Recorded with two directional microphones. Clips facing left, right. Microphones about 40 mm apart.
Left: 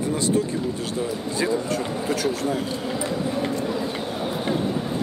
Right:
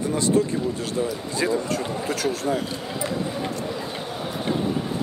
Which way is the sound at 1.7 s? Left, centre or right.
Left.